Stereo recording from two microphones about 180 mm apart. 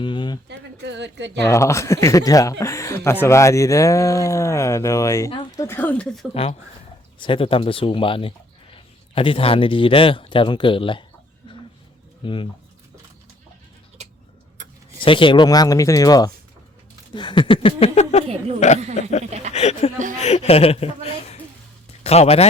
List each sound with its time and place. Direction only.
0.0 s a sound: 25° left (ahead or behind)
0.4 s a woman's voice: 70° right (ahead or behind)
1.5 s speech: 15° left (ahead or behind)
6.3 s a woman's voice: 35° left (ahead or behind)
12.2 s speech: 30° left (ahead or behind)
14.9 s a woman's voice: 30° left (ahead or behind)
18.3 s a sound: 35° right (ahead or behind)
19.3 s speech: 40° right (ahead or behind)
19.5 s a woman's voice: 40° left (ahead or behind)